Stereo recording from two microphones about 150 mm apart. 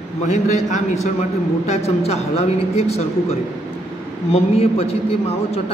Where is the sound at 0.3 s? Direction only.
50° left (ahead or behind).